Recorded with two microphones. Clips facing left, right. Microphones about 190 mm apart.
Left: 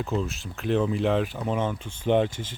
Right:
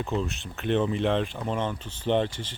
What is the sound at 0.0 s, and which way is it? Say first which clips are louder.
Speech: left 1 dB; centre (ahead or behind).